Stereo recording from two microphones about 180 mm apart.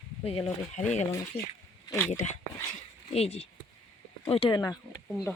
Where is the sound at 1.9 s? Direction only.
20° left (ahead or behind).